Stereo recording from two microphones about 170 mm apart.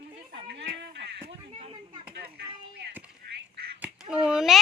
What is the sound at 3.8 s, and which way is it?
Speech, 5° right (ahead or behind).